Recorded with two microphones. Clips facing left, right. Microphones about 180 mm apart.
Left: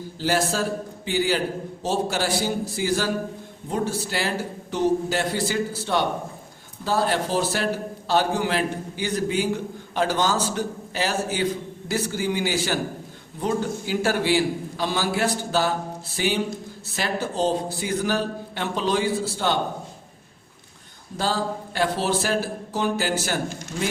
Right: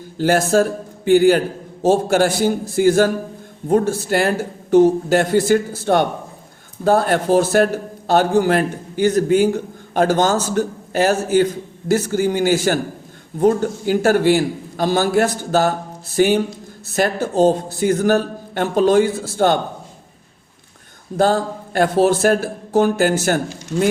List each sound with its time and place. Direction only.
0.2 s a man's voice: 50° right (ahead or behind)
21.2 s a man's voice: 50° right (ahead or behind)